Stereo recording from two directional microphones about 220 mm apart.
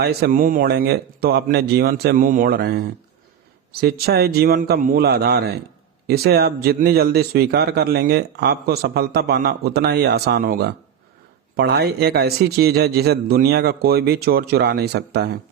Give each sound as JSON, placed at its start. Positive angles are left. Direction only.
{"t": 0.0, "sound": "speech", "side_deg": -45}